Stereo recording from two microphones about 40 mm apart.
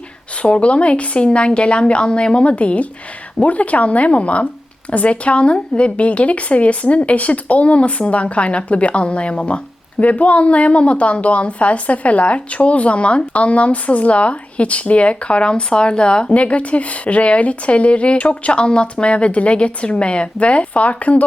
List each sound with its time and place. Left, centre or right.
0.4 s a woman's voice: left
16.3 s a woman's voice: left